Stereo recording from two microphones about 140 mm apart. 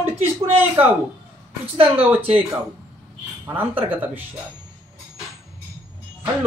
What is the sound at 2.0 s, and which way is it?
Speech, 10° right (ahead or behind).